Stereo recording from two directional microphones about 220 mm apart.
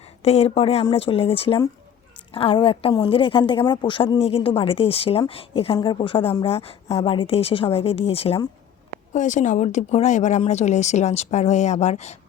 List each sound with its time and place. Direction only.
0.2 s a woman's voice: 30° left (ahead or behind)